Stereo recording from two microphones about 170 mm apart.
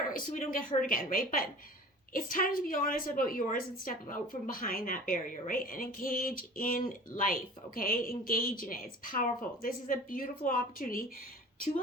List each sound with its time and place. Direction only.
0.1 s a woman's voice: 55° left (ahead or behind)